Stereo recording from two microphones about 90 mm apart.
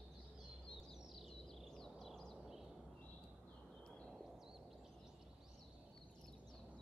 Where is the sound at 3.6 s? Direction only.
5° left (ahead or behind).